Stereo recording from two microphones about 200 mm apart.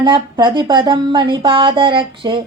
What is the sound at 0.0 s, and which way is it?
Speech, 20° right (ahead or behind).